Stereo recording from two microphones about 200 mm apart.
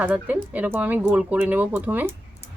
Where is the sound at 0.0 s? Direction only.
10° right (ahead or behind).